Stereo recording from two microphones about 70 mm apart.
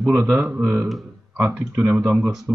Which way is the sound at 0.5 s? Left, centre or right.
Right.